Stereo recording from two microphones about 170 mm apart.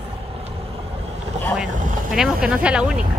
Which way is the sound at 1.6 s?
5° right (ahead or behind).